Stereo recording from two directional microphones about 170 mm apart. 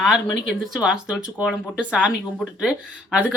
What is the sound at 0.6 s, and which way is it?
A woman's voice, 5° right (ahead or behind).